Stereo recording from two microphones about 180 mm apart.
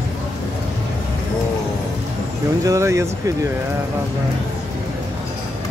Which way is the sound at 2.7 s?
15° right (ahead or behind).